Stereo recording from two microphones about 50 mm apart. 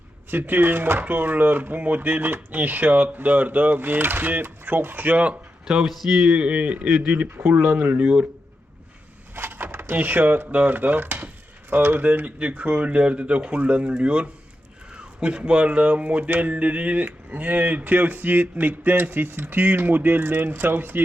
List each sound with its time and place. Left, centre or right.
0.3 s speech: right
5.6 s speech: centre
6.3 s speech: right
6.8 s speech: centre
7.3 s speech: right
7.7 s speech: right
9.3 s a sound: right
9.9 s speech: right